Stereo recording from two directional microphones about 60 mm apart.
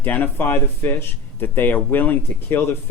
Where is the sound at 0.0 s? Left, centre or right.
Left.